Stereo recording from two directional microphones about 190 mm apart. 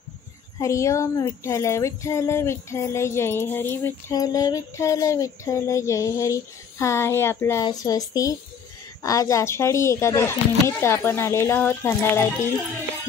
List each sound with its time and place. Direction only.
0.6 s speech: 15° left (ahead or behind)